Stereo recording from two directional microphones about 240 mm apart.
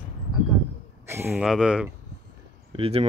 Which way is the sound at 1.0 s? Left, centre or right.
Centre.